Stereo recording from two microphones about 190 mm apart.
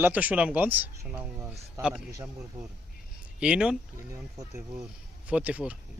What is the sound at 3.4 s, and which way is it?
Speech, 5° right (ahead or behind).